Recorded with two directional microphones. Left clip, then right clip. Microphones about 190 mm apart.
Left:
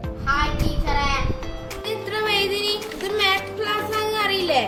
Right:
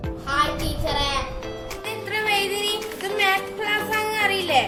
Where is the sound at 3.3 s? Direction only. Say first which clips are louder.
Even; centre (ahead or behind).